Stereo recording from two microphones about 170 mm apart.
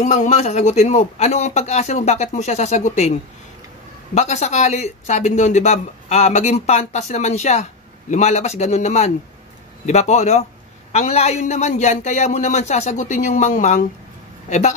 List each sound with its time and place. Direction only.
0.0 s a man's voice: 45° left (ahead or behind)